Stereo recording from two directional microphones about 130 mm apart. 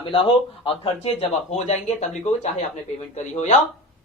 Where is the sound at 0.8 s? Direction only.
50° left (ahead or behind).